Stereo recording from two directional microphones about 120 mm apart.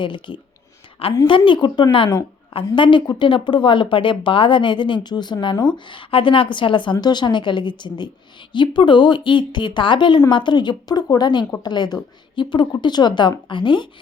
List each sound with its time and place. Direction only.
0.0 s speech: 45° left (ahead or behind)